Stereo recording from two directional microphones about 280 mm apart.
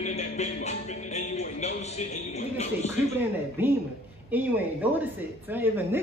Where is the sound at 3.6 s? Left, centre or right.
Centre.